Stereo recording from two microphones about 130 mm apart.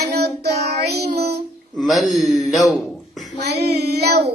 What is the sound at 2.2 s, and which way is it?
Speech, 70° left (ahead or behind).